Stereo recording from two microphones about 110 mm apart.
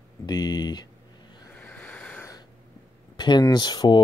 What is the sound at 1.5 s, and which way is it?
Vehicle, 15° left (ahead or behind).